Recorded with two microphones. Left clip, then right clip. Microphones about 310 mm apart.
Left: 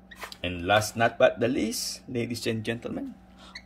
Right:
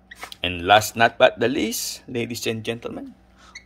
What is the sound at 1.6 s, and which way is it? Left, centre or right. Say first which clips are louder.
Speech: right 4 dB; centre.